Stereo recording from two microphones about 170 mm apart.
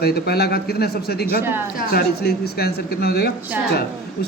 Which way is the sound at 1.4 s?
15° right (ahead or behind).